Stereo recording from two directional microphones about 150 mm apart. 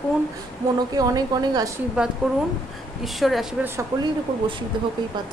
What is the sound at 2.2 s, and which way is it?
A woman's voice, 5° right (ahead or behind).